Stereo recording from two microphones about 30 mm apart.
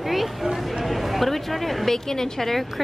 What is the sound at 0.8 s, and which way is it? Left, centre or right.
Speech, centre.